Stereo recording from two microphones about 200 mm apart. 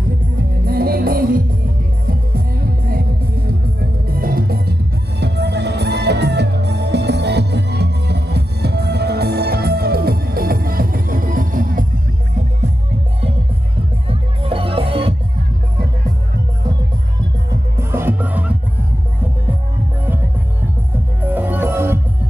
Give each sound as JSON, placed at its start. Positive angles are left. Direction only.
{"t": 0.0, "sound": "music", "side_deg": -45}
{"t": 14.0, "sound": "music", "side_deg": -25}
{"t": 17.7, "sound": "music", "side_deg": -10}
{"t": 21.2, "sound": "music", "side_deg": -10}